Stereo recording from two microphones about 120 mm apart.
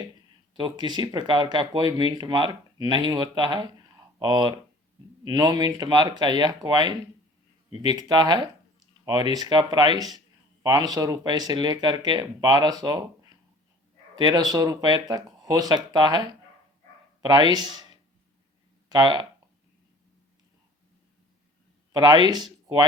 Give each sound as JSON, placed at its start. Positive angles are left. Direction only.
{"t": 0.5, "sound": "speech", "side_deg": -40}
{"t": 14.2, "sound": "speech", "side_deg": -35}
{"t": 17.2, "sound": "speech", "side_deg": -40}
{"t": 21.9, "sound": "speech", "side_deg": -35}